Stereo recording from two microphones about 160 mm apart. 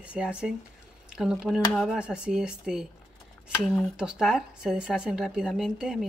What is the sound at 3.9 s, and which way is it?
Speech, 5° right (ahead or behind).